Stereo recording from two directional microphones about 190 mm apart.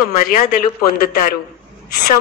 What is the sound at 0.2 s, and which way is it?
A man's voice, 45° left (ahead or behind).